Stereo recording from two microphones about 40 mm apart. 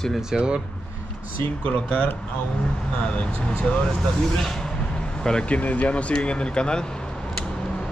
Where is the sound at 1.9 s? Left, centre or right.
Left.